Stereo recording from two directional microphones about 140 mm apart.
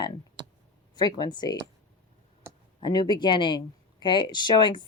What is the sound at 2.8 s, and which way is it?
Speech, 30° left (ahead or behind).